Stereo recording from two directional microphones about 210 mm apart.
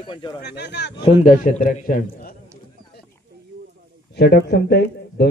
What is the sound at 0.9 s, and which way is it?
A man's voice, 30° left (ahead or behind).